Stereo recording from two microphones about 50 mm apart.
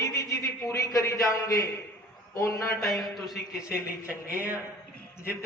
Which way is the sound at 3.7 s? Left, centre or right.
Right.